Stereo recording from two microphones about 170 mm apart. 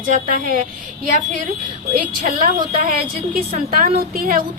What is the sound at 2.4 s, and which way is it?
A woman's voice, 55° right (ahead or behind).